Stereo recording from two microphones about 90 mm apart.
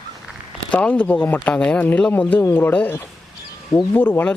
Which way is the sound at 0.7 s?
15° left (ahead or behind).